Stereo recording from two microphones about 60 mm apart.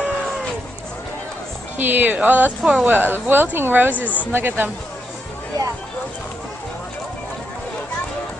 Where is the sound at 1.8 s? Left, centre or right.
Right.